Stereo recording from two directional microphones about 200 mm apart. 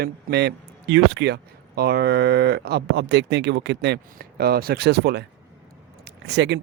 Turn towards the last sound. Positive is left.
turn(degrees=-60)  # may be behind; listen again after turning